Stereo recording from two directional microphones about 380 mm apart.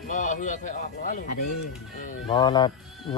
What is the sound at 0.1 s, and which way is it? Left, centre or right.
Speech, centre.